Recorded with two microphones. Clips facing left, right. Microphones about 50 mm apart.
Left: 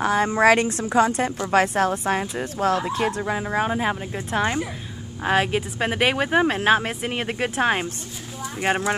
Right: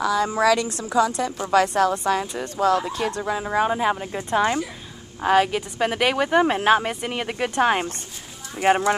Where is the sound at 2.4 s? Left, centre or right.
Centre.